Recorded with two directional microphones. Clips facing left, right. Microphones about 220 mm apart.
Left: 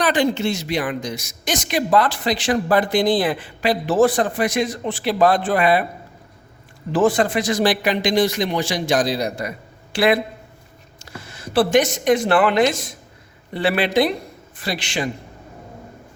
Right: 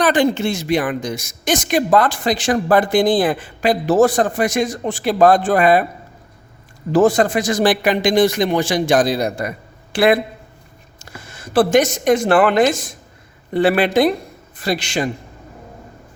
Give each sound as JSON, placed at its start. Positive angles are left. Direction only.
{"t": 0.0, "sound": "speech", "side_deg": -50}
{"t": 6.9, "sound": "a man's voice", "side_deg": -45}
{"t": 11.2, "sound": "speech", "side_deg": -50}